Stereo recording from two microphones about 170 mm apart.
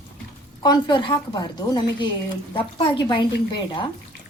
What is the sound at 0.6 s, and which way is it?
A woman's voice, 25° left (ahead or behind).